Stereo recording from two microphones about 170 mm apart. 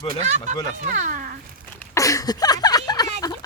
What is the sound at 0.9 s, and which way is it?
Speech, 50° right (ahead or behind).